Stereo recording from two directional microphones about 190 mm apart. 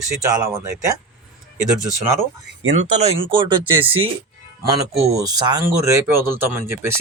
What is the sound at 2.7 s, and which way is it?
Speech, 35° right (ahead or behind).